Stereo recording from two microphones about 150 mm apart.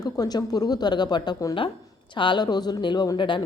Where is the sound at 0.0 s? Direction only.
25° left (ahead or behind).